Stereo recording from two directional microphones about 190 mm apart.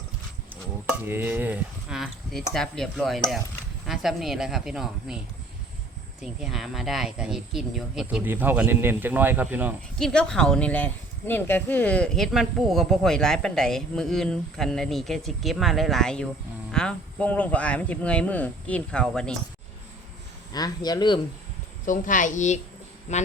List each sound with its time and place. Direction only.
0.5 s speech: 10° right (ahead or behind)
6.2 s speech: centre (ahead or behind)
10.0 s speech: 5° left (ahead or behind)
20.5 s speech: 20° left (ahead or behind)
21.8 s a woman's voice: 45° left (ahead or behind)